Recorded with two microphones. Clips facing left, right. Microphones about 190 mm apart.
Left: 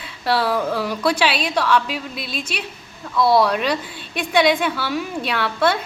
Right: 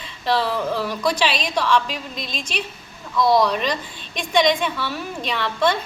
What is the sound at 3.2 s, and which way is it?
Speech, 15° right (ahead or behind).